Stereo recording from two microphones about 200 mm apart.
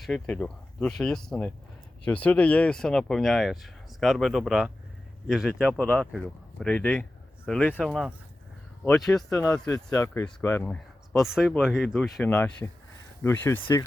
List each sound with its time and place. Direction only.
0.0 s speech: 5° left (ahead or behind)
11.6 s speech: centre (ahead or behind)